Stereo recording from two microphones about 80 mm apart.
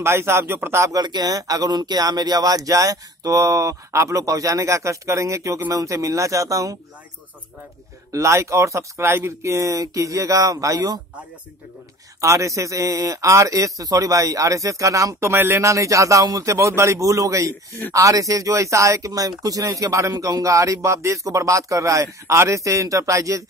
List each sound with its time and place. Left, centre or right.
0.0 s speech: right
1.0 s speech: right
8.1 s speech: right
12.2 s speech: right